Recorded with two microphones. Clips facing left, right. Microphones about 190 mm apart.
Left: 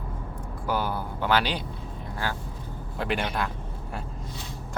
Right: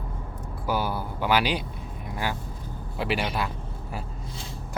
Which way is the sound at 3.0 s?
5° right (ahead or behind).